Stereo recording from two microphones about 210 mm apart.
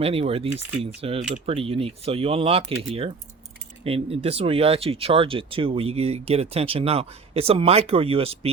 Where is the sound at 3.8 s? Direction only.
30° right (ahead or behind).